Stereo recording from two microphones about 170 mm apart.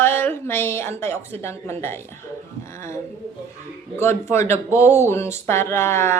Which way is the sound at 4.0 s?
15° left (ahead or behind).